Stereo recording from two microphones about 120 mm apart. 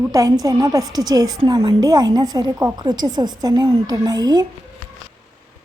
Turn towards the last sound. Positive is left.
turn(degrees=-35)  # may be behind; listen again after turning